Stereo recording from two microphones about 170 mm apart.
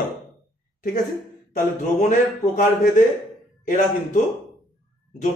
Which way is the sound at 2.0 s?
45° left (ahead or behind).